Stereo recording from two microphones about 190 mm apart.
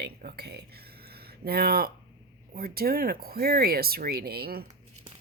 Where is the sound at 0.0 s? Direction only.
55° right (ahead or behind).